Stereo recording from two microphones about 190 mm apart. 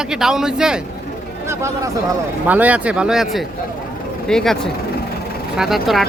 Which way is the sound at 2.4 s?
10° right (ahead or behind).